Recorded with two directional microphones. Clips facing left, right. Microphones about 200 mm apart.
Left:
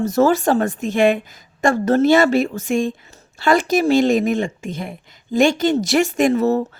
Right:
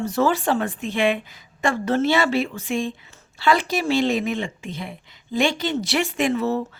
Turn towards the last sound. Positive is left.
turn(degrees=45)  # may be behind; listen again after turning